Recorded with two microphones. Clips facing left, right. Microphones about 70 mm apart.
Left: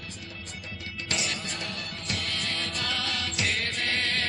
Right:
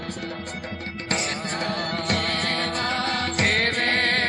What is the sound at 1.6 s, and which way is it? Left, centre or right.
Music, right.